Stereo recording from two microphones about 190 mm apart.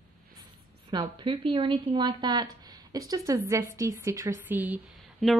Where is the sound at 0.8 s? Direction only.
25° right (ahead or behind).